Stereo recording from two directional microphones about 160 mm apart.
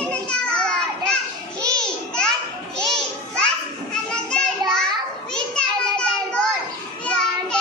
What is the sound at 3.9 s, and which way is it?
Children playing, 5° left (ahead or behind).